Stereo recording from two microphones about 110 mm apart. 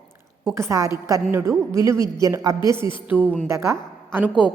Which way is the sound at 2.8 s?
50° left (ahead or behind).